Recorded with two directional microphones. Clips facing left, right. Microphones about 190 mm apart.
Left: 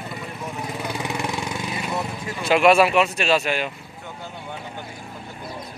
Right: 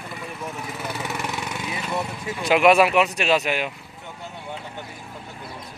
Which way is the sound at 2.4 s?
15° right (ahead or behind).